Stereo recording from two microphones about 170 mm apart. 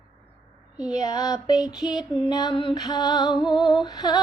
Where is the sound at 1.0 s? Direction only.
20° left (ahead or behind).